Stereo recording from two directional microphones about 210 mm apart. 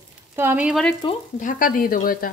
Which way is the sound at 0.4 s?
10° right (ahead or behind).